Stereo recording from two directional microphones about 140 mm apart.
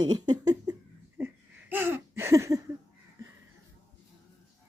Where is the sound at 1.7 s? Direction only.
15° right (ahead or behind).